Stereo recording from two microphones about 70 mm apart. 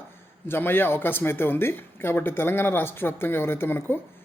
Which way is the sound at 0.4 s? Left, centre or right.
Left.